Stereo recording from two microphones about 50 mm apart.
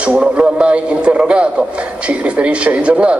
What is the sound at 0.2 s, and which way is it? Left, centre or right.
Speech, right.